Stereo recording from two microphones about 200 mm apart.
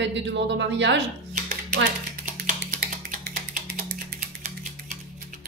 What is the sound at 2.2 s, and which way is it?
Finger snapping, 40° right (ahead or behind).